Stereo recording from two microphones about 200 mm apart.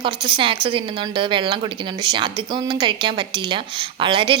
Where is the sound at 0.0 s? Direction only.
25° right (ahead or behind).